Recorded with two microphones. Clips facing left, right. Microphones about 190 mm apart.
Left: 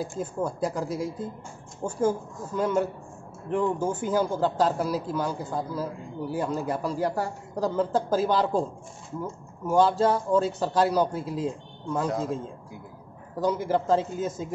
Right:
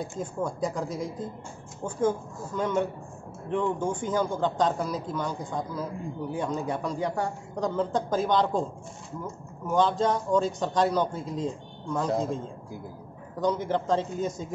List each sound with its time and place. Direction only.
0.0 s a man's voice: 5° left (ahead or behind)
13.4 s a man's voice: 5° left (ahead or behind)